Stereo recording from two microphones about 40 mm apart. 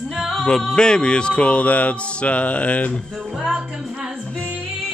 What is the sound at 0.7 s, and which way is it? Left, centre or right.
Speech, left.